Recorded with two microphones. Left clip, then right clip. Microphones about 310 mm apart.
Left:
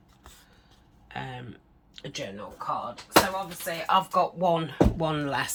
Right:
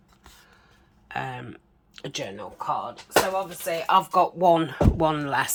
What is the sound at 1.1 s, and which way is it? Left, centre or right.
Speech, centre.